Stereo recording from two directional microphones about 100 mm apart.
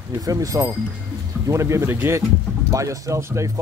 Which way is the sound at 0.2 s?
35° right (ahead or behind).